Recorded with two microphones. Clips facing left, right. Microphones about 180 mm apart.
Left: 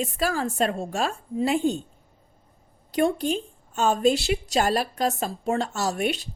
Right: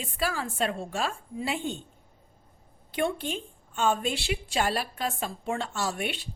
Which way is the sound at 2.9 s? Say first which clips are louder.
Left 6 dB; 40° left (ahead or behind).